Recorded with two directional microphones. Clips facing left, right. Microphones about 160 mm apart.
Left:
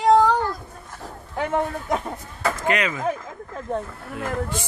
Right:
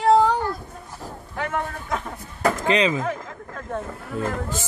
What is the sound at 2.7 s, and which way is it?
Speech, 25° right (ahead or behind).